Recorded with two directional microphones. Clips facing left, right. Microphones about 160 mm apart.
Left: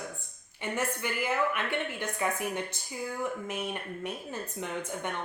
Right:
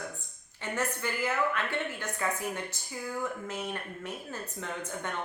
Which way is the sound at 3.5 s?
15° left (ahead or behind).